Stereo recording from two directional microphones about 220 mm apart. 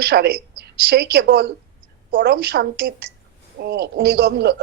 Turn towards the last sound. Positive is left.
turn(degrees=-45)  # may be behind; listen again after turning